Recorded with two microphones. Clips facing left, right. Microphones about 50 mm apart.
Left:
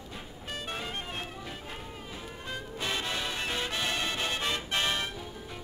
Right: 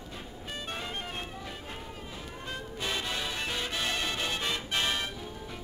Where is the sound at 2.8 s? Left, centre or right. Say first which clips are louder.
Left 1 dB; centre.